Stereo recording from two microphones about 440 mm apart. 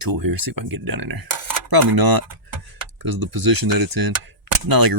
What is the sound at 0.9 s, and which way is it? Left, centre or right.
Cutlery, right.